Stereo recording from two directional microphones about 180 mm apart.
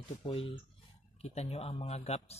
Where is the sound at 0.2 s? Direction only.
30° left (ahead or behind).